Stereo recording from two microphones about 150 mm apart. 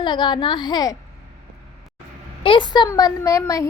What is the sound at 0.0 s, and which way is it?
Speech, 30° left (ahead or behind).